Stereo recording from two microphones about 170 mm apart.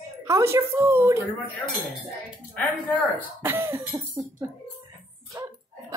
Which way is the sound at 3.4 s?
15° right (ahead or behind).